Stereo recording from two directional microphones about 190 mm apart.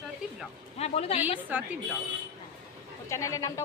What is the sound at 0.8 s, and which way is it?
Speech, 35° left (ahead or behind).